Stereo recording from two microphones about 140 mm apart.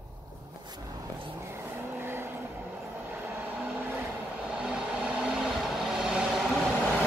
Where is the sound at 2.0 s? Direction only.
15° right (ahead or behind).